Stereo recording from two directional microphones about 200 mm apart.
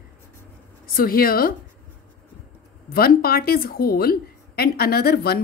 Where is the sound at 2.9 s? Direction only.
50° left (ahead or behind).